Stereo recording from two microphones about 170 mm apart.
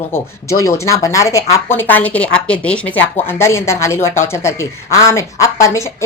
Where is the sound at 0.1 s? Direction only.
15° left (ahead or behind).